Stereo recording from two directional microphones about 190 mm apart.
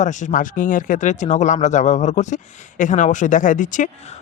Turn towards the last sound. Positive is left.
turn(degrees=40)  # may be behind; listen again after turning